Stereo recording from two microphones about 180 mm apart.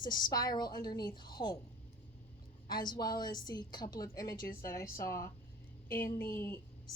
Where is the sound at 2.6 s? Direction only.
25° left (ahead or behind).